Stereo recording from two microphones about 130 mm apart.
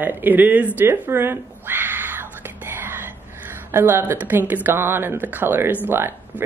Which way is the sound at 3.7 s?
20° right (ahead or behind).